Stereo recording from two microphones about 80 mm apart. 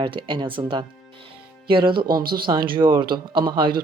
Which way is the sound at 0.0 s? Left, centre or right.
Right.